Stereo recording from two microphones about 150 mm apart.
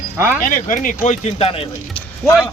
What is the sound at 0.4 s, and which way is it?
Speech, 65° left (ahead or behind).